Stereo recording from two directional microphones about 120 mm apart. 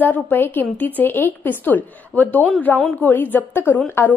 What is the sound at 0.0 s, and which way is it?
A woman's voice, 15° left (ahead or behind).